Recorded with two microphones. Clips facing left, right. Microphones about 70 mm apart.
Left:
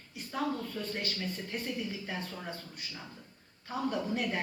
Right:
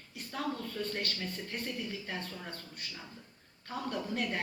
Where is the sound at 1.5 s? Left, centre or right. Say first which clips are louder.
Left 2 dB; centre.